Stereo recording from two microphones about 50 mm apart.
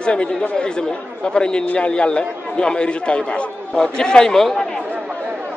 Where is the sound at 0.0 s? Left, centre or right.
Left.